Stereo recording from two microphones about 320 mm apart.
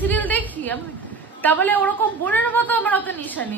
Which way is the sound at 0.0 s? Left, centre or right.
Centre.